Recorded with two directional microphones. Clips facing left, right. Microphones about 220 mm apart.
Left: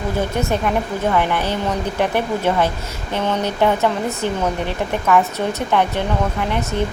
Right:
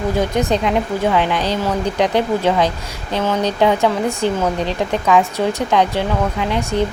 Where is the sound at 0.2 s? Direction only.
15° right (ahead or behind).